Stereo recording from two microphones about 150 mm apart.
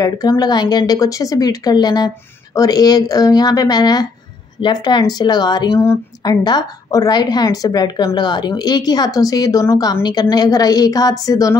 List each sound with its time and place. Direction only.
0.0 s speech: 25° left (ahead or behind)
5.8 s speech: 15° left (ahead or behind)